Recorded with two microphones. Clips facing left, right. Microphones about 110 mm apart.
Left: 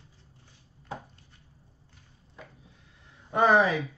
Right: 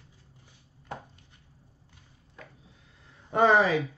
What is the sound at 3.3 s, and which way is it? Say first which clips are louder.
Speech: even; 25° right (ahead or behind).